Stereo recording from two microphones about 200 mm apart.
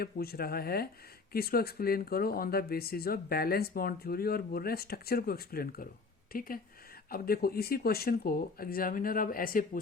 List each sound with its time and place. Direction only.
0.0 s speech: 50° left (ahead or behind)